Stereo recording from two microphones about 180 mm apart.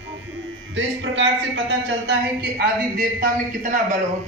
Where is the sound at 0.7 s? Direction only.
90° right.